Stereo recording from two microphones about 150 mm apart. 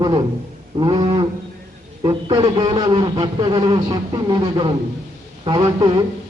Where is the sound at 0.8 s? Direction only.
30° right (ahead or behind).